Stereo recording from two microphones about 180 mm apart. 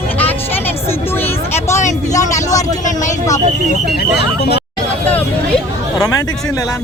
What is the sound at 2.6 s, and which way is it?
Vehicle, 45° left (ahead or behind).